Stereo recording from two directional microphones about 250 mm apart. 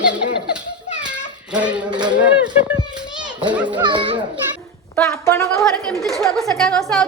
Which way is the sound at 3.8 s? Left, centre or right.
Centre.